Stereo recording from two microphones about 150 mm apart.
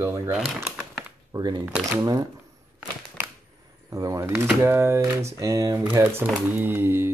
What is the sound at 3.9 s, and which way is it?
Speech, 20° right (ahead or behind).